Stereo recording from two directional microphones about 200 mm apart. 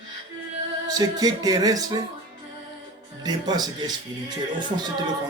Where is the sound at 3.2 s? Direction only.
20° right (ahead or behind).